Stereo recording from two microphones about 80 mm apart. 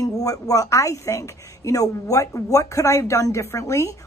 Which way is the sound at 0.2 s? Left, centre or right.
Left.